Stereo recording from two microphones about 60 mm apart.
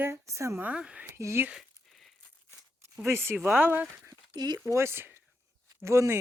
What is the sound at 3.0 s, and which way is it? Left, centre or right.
Speech, right.